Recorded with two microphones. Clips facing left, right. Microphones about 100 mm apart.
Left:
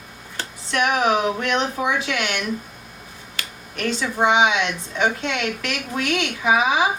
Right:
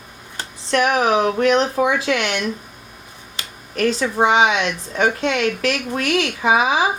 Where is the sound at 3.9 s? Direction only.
35° right (ahead or behind).